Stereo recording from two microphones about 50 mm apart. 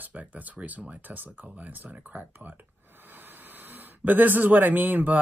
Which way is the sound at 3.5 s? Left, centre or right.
Right.